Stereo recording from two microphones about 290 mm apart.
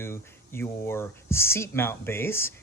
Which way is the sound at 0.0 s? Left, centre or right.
Centre.